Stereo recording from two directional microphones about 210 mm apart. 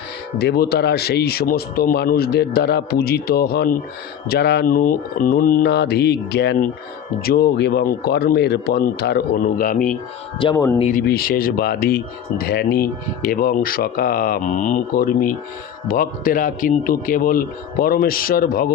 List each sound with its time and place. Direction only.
0.3 s speech: 50° left (ahead or behind)
10.4 s speech: 15° left (ahead or behind)
10.8 s speech: 35° left (ahead or behind)
11.0 s speech: 45° left (ahead or behind)